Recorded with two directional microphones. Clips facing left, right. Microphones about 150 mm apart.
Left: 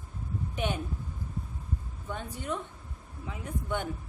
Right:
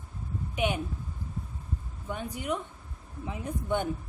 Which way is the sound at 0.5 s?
10° right (ahead or behind).